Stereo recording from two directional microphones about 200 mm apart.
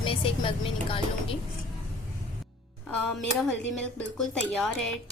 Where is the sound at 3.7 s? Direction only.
5° left (ahead or behind).